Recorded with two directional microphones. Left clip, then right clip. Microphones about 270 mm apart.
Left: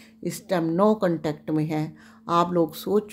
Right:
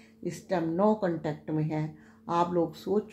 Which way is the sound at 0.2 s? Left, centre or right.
Left.